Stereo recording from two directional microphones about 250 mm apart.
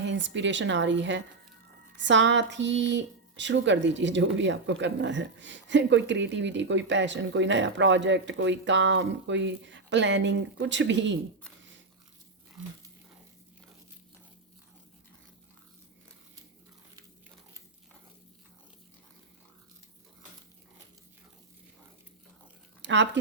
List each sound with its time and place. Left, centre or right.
0.0 s speech: right
22.8 s speech: right